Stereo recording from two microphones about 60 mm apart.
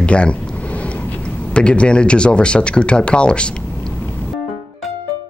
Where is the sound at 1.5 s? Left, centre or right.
Centre.